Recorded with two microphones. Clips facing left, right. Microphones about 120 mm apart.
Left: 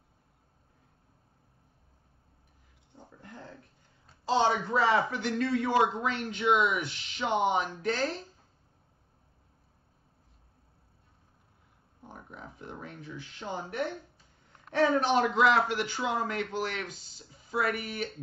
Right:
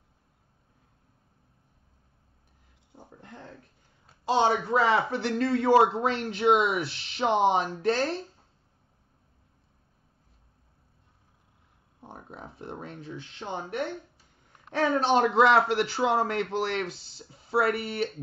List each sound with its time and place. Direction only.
4.3 s a man's voice: 20° right (ahead or behind)
12.0 s speech: 25° right (ahead or behind)
15.0 s a man's voice: 30° right (ahead or behind)